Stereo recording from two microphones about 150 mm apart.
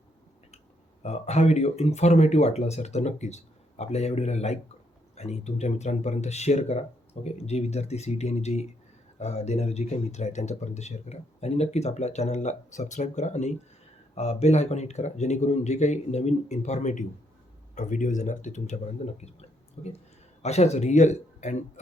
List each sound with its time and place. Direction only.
1.0 s speech: 45° left (ahead or behind)